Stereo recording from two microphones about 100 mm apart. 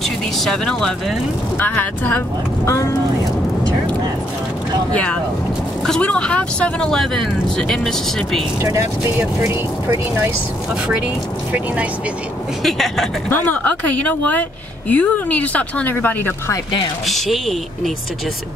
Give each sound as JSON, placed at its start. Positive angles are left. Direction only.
{"t": 0.0, "sound": "speech", "side_deg": 5}
{"t": 1.6, "sound": "speech", "side_deg": 20}
{"t": 2.7, "sound": "speech", "side_deg": 30}
{"t": 4.9, "sound": "speech", "side_deg": 15}
{"t": 8.6, "sound": "speech", "side_deg": -30}
{"t": 11.5, "sound": "speech", "side_deg": -15}
{"t": 12.6, "sound": "speech", "side_deg": 0}
{"t": 13.3, "sound": "speech", "side_deg": 15}
{"t": 17.0, "sound": "speech", "side_deg": 0}